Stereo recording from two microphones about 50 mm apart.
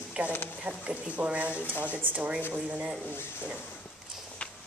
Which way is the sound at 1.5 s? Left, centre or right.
Left.